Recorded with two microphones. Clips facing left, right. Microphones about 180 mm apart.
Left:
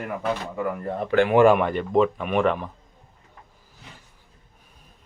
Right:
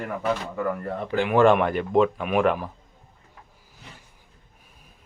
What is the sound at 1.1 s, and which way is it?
Speech, 70° left (ahead or behind).